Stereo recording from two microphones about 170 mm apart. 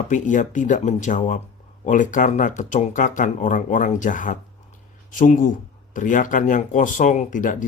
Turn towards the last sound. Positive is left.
turn(degrees=50)  # may be behind; listen again after turning